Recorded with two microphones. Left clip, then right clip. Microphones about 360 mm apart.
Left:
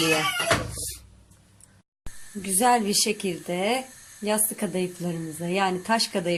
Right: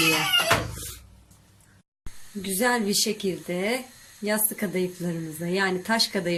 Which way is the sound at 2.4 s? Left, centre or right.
Centre.